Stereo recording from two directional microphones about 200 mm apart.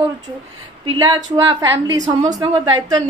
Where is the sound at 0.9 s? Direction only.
15° right (ahead or behind).